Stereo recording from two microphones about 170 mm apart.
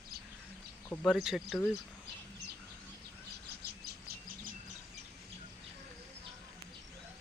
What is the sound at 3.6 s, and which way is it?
Bird, 70° right (ahead or behind).